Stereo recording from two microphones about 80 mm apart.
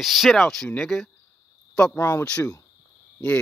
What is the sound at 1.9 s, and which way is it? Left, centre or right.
Speech, left.